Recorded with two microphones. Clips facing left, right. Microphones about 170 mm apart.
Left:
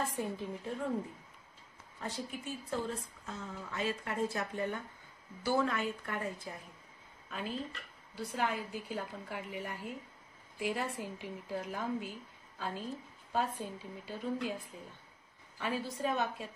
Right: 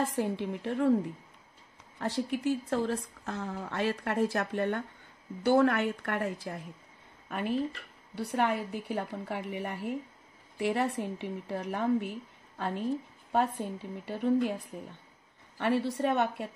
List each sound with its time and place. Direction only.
0.0 s a woman's voice: 90° right
2.0 s a woman's voice: 75° right (ahead or behind)
7.2 s a woman's voice: 65° right (ahead or behind)
15.5 s a woman's voice: 65° right (ahead or behind)